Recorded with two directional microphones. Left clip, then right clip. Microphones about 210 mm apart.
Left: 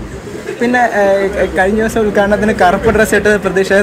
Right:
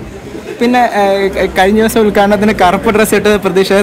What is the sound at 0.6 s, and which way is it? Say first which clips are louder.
Speech: right 2 dB; 20° right (ahead or behind).